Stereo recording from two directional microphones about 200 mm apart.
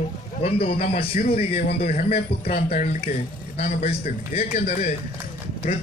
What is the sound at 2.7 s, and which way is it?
Speech, 30° left (ahead or behind).